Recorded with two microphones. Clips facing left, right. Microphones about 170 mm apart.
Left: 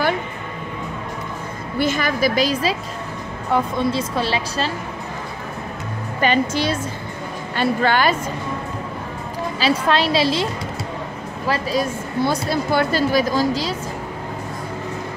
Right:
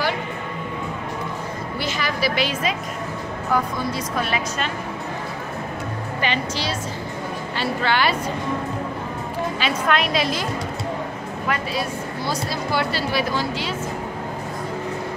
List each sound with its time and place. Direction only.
1.8 s a woman's voice: 50° left (ahead or behind)
3.4 s a woman's voice: 25° left (ahead or behind)
6.2 s a woman's voice: 50° left (ahead or behind)
9.6 s a woman's voice: 30° left (ahead or behind)
12.3 s speech: 50° left (ahead or behind)